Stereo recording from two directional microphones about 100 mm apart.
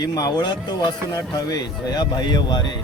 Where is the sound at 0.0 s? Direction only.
40° left (ahead or behind).